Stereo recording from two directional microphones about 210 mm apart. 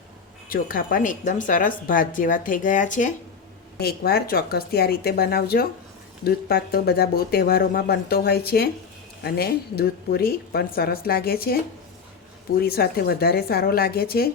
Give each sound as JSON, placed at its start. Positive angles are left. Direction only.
{"t": 0.4, "sound": "a woman's voice", "side_deg": 45}
{"t": 3.8, "sound": "speech", "side_deg": 50}
{"t": 12.6, "sound": "speech", "side_deg": 45}